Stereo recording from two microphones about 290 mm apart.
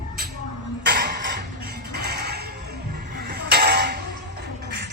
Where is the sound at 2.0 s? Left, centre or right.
Right.